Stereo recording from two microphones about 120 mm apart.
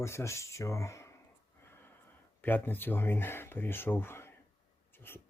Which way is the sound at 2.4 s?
15° left (ahead or behind).